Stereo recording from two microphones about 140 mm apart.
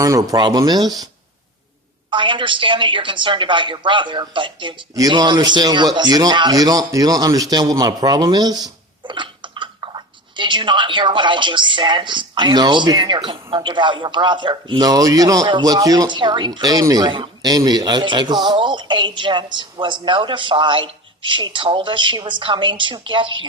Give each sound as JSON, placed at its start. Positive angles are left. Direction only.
{"t": 0.0, "sound": "speech", "side_deg": -25}
{"t": 2.0, "sound": "a man's voice", "side_deg": -35}